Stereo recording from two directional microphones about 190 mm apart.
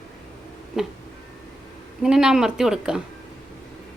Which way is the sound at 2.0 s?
5° right (ahead or behind).